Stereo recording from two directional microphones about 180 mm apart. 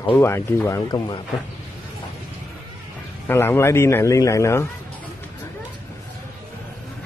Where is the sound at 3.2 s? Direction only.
15° left (ahead or behind).